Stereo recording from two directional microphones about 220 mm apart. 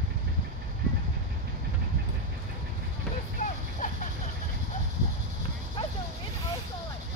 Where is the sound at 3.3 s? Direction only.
35° left (ahead or behind).